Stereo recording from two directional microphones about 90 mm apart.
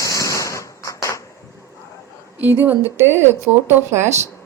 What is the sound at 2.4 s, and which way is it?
Speech, 20° right (ahead or behind).